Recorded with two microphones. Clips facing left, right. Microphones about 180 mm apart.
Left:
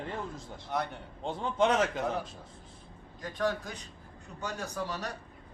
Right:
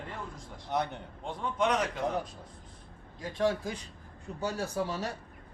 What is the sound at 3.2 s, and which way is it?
Speech, 30° right (ahead or behind).